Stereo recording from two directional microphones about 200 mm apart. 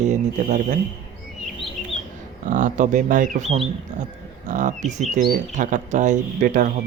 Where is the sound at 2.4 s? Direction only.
40° right (ahead or behind).